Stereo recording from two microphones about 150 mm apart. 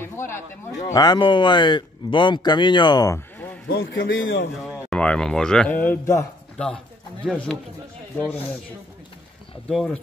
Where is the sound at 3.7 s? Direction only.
90° left.